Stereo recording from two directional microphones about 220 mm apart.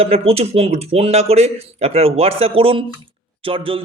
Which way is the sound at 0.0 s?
25° right (ahead or behind).